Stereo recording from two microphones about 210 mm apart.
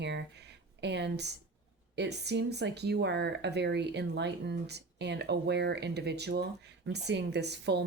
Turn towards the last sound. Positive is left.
turn(degrees=-55)  # may be behind; listen again after turning